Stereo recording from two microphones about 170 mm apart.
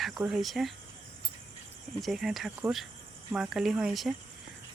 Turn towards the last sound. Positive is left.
turn(degrees=0)  # may be behind; listen again after turning